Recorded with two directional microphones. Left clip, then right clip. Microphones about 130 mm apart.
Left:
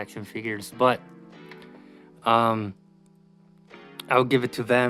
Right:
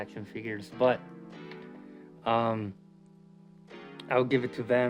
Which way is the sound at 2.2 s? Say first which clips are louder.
Left 7 dB; 40° left (ahead or behind).